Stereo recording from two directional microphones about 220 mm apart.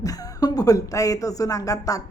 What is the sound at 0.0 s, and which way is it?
A woman's voice, 15° left (ahead or behind).